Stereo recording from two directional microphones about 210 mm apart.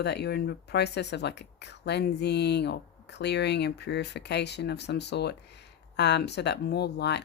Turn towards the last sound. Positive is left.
turn(degrees=50)  # may be behind; listen again after turning